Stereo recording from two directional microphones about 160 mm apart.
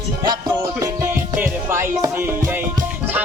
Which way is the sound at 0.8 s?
15° right (ahead or behind).